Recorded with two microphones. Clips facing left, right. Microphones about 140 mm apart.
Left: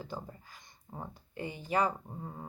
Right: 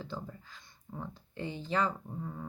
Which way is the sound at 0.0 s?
10° left (ahead or behind).